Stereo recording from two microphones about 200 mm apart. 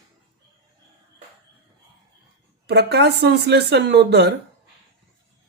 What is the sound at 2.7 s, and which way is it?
Speech, 55° right (ahead or behind).